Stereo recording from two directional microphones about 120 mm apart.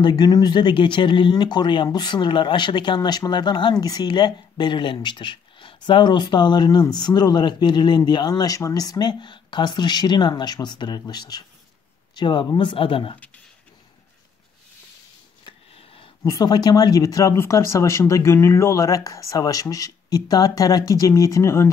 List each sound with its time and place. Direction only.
0.0 s speech: 35° left (ahead or behind)
15.4 s sniff: 55° left (ahead or behind)
16.3 s speech: 35° left (ahead or behind)